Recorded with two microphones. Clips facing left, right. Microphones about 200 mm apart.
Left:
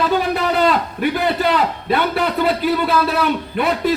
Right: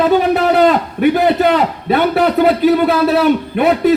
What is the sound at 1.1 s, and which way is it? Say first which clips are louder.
A man's voice: right 3 dB; 50° right (ahead or behind).